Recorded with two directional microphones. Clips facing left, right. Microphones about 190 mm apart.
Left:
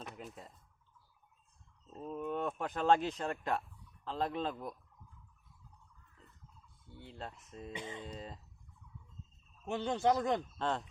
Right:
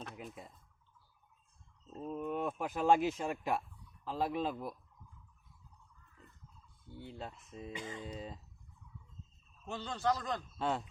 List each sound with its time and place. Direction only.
0.2 s speech: 5° right (ahead or behind)
2.0 s speech: 5° right (ahead or behind)
6.9 s speech: centre (ahead or behind)
7.8 s speech: 25° left (ahead or behind)
8.0 s speech: 5° right (ahead or behind)
9.6 s speech: 20° left (ahead or behind)
10.6 s speech: 5° right (ahead or behind)